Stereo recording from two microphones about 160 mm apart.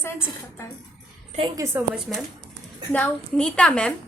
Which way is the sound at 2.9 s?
10° left (ahead or behind).